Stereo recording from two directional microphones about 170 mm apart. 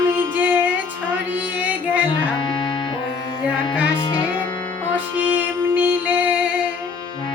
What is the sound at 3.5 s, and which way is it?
Music, 10° right (ahead or behind).